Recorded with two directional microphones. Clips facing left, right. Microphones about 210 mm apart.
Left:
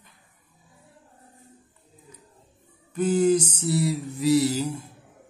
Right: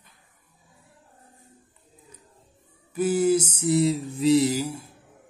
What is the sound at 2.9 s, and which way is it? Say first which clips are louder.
Speech: left 1 dB; 5° right (ahead or behind).